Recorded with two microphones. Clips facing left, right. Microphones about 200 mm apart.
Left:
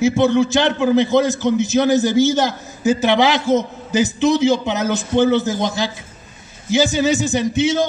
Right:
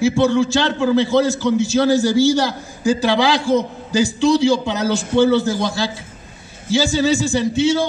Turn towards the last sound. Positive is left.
turn(degrees=20)  # may be behind; listen again after turning